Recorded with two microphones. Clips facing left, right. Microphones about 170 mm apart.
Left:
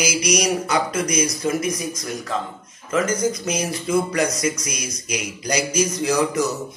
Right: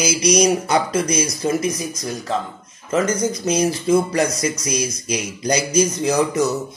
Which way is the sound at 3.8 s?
25° right (ahead or behind).